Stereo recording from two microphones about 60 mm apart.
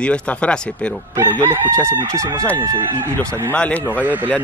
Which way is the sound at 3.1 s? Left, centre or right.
Left.